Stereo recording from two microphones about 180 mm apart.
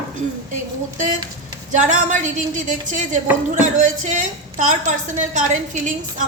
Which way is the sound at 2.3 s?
45° right (ahead or behind).